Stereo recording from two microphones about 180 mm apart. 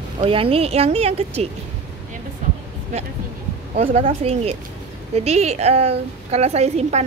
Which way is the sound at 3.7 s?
35° right (ahead or behind).